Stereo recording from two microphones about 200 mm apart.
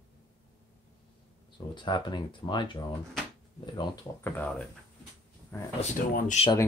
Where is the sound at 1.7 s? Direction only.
25° left (ahead or behind).